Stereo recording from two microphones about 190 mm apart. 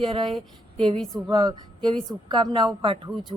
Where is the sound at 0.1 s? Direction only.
25° right (ahead or behind).